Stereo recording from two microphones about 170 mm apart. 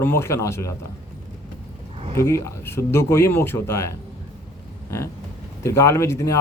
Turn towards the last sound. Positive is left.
turn(degrees=15)  # may be behind; listen again after turning